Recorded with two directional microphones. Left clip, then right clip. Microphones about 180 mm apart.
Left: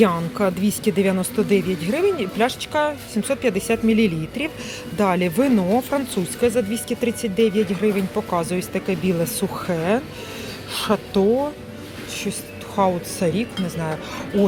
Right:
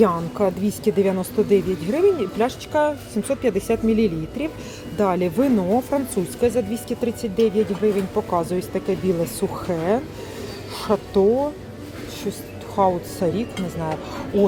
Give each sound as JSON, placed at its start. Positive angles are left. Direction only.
{"t": 0.0, "sound": "speech", "side_deg": -5}
{"t": 12.7, "sound": "speech", "side_deg": 0}